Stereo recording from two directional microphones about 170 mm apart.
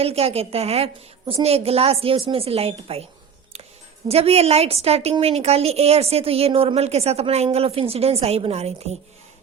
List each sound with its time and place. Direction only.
0.0 s a woman's voice: 35° right (ahead or behind)
4.1 s a woman's voice: 35° right (ahead or behind)